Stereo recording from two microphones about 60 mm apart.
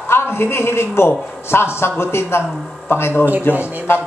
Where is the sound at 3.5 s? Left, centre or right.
Right.